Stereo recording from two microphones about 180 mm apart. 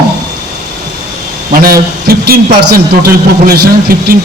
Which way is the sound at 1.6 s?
55° right (ahead or behind).